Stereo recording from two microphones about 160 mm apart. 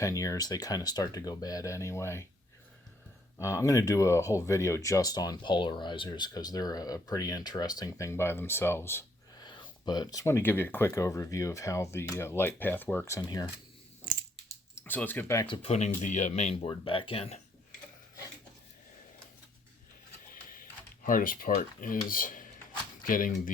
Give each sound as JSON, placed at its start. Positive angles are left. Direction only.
{"t": 0.0, "sound": "speech", "side_deg": 20}
{"t": 3.3, "sound": "speech", "side_deg": 20}
{"t": 9.4, "sound": "speech", "side_deg": 30}
{"t": 14.8, "sound": "speech", "side_deg": 10}
{"t": 15.4, "sound": "speech", "side_deg": 30}
{"t": 16.0, "sound": "speech", "side_deg": 50}
{"t": 20.3, "sound": "dishes", "side_deg": 60}
{"t": 23.0, "sound": "speech", "side_deg": 60}